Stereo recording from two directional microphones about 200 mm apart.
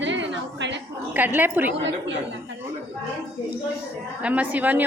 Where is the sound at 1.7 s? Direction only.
65° right (ahead or behind).